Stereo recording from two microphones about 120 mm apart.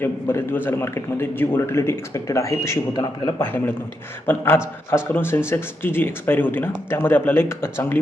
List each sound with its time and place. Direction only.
0.0 s a man's voice: 15° left (ahead or behind)